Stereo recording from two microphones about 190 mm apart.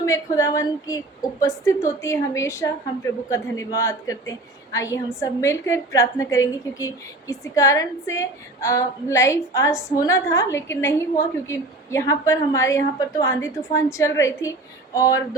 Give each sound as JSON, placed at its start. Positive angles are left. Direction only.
{"t": 0.0, "sound": "a woman's voice", "side_deg": 15}